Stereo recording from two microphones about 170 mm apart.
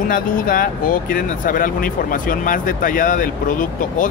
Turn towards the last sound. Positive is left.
turn(degrees=50)  # may be behind; listen again after turning